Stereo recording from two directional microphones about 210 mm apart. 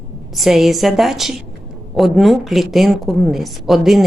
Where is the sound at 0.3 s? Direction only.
Centre (ahead or behind).